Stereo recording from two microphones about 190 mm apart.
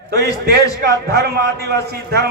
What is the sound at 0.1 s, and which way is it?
A man's voice, 60° right (ahead or behind).